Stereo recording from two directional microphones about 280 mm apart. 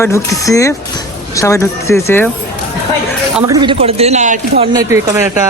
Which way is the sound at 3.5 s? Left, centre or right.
Centre.